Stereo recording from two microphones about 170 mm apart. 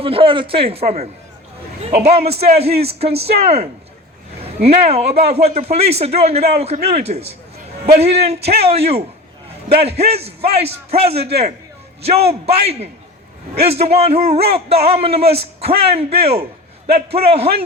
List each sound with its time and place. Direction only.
0.0 s a man's voice: 35° right (ahead or behind)